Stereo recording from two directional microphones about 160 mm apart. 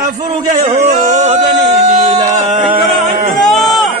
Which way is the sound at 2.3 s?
50° right (ahead or behind).